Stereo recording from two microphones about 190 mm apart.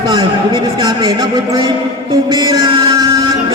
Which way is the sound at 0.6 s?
20° right (ahead or behind).